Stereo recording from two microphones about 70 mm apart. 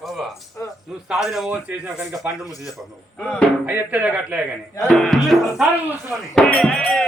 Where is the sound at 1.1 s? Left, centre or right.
Centre.